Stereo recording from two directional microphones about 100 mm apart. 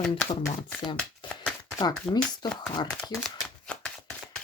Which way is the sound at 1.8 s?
45° left (ahead or behind).